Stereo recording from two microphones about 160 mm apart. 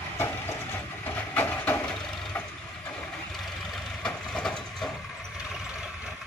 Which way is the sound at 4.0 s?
5° left (ahead or behind).